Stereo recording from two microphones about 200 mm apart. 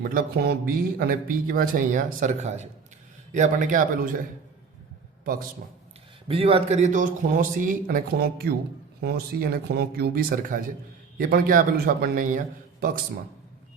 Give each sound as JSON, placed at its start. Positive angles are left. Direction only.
{"t": 0.1, "sound": "a man's voice", "side_deg": -45}
{"t": 6.2, "sound": "speech", "side_deg": -30}